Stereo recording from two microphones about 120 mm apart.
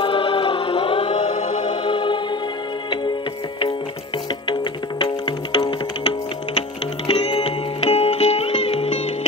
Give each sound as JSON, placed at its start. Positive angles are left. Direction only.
{"t": 0.0, "sound": "chant", "side_deg": 45}
{"t": 1.3, "sound": "music", "side_deg": 90}
{"t": 1.7, "sound": "music", "side_deg": 45}
{"t": 5.0, "sound": "music", "side_deg": 40}